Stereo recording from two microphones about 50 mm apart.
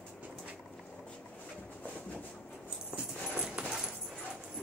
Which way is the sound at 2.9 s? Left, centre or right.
Centre.